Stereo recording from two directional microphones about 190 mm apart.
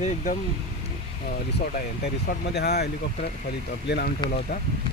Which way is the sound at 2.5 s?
60° left (ahead or behind).